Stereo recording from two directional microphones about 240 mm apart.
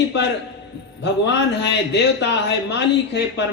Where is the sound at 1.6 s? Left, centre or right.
Left.